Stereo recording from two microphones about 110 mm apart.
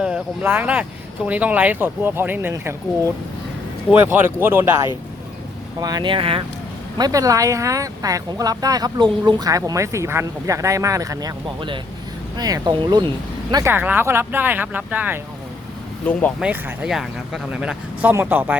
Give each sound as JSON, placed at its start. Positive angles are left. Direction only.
{"t": 0.4, "sound": "speech", "side_deg": -20}
{"t": 3.9, "sound": "speech", "side_deg": -20}
{"t": 5.8, "sound": "speech", "side_deg": -40}
{"t": 7.0, "sound": "speech", "side_deg": -30}
{"t": 13.7, "sound": "speech", "side_deg": -20}
{"t": 16.1, "sound": "speech", "side_deg": 10}
{"t": 16.4, "sound": "speech", "side_deg": -10}
{"t": 18.1, "sound": "speech", "side_deg": -20}